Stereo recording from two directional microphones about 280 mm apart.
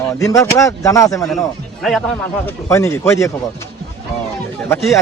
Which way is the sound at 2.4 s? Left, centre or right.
Centre.